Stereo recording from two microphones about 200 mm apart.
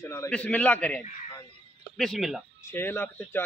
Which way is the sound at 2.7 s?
10° left (ahead or behind).